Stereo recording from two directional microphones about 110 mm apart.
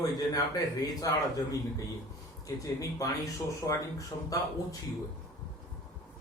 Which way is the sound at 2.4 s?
30° left (ahead or behind).